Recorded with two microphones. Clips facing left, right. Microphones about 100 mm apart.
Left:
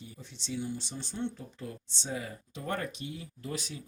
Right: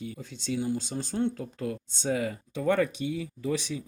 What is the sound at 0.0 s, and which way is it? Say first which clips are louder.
Speech: right 9 dB; 85° right.